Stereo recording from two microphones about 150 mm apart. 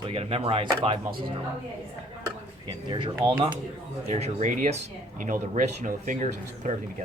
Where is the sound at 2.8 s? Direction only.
35° right (ahead or behind).